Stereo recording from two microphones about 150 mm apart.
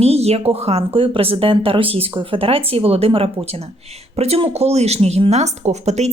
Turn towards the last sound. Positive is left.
turn(degrees=-45)  # may be behind; listen again after turning